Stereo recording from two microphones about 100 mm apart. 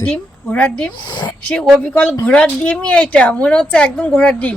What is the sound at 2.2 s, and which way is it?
A woman's voice, 10° left (ahead or behind).